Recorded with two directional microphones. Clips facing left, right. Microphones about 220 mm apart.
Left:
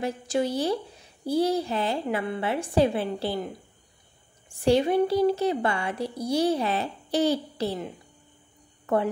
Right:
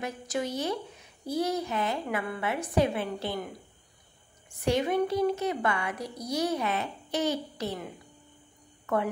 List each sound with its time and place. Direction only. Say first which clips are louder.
0.0 s a woman's voice: left 6 dB; 30° left (ahead or behind)
4.5 s a woman's voice: left 5 dB; 30° left (ahead or behind)